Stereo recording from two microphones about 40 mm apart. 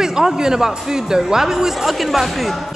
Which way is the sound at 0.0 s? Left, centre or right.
Centre.